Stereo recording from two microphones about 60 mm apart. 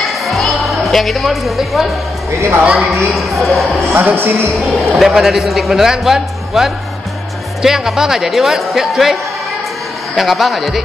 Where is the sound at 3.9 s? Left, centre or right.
Right.